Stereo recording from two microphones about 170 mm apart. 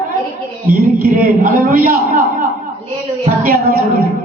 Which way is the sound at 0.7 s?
55° right (ahead or behind).